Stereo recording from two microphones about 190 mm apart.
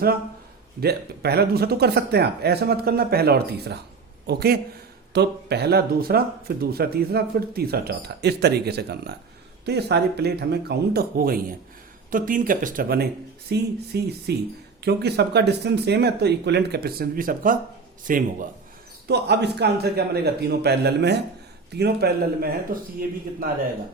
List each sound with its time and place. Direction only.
0.8 s speech: 55° right (ahead or behind)
19.0 s speech: 60° right (ahead or behind)